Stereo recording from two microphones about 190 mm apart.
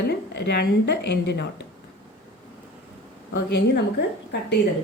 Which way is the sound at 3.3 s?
65° left (ahead or behind).